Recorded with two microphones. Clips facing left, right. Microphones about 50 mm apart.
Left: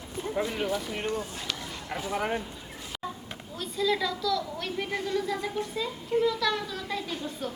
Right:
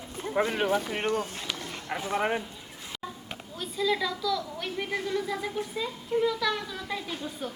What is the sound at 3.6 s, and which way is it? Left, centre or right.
A woman's voice, centre.